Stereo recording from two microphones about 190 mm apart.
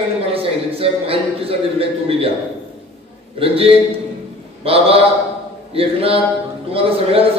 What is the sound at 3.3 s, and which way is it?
A man's voice, 30° right (ahead or behind).